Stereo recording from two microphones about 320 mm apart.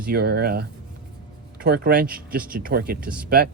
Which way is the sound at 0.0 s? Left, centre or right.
Right.